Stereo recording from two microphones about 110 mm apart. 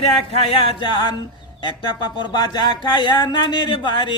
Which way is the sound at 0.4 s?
55° left (ahead or behind).